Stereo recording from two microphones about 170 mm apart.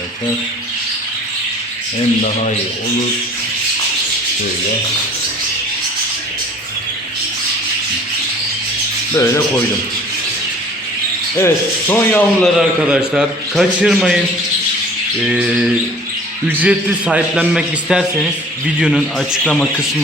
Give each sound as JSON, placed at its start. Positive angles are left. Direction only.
{"t": 9.1, "sound": "rub", "side_deg": 15}
{"t": 11.3, "sound": "rub", "side_deg": 15}
{"t": 12.5, "sound": "a man's voice", "side_deg": -5}
{"t": 15.2, "sound": "a man's voice", "side_deg": -5}